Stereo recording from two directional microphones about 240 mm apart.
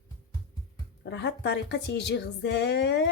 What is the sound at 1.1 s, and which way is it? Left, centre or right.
Speech, left.